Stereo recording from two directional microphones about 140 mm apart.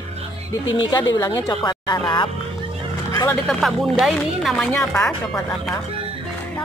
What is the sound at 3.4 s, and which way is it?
Speech, centre (ahead or behind).